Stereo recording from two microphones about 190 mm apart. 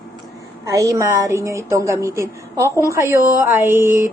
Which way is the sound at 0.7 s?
15° right (ahead or behind).